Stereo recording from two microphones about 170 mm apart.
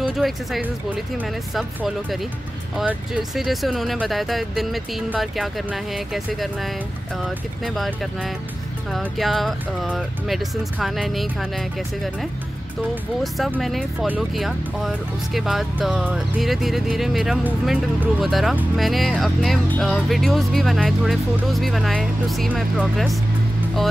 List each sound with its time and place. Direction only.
0.0 s speech: centre (ahead or behind)
13.6 s speech: centre (ahead or behind)